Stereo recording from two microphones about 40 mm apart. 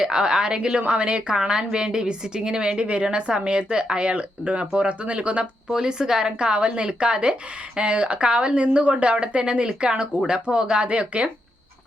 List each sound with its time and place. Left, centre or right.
0.0 s a woman's voice: centre
5.6 s a woman's voice: centre